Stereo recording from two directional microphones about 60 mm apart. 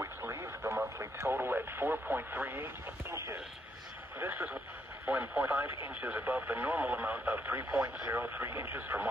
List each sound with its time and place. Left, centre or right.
0.0 s radio: right
0.9 s speech: right
4.2 s speech: right
5.0 s speech: right
5.9 s speech: right